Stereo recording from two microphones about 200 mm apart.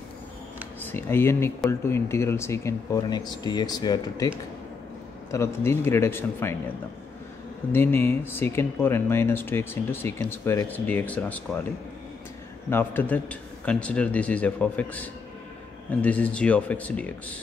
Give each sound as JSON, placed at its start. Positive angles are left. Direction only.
{"t": 0.9, "sound": "speech", "side_deg": 10}
{"t": 5.3, "sound": "speech", "side_deg": 15}
{"t": 7.7, "sound": "speech", "side_deg": 10}
{"t": 12.6, "sound": "speech", "side_deg": 10}